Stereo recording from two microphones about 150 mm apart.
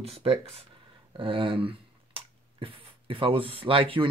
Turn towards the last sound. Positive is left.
turn(degrees=-35)  # may be behind; listen again after turning